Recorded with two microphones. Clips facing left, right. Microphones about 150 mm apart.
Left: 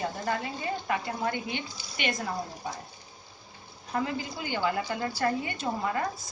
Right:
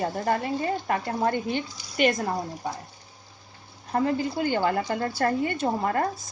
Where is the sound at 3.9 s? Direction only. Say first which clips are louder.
Right 7 dB; 45° right (ahead or behind).